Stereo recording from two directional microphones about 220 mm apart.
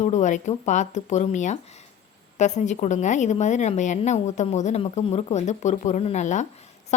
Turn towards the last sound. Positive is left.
turn(degrees=35)  # may be behind; listen again after turning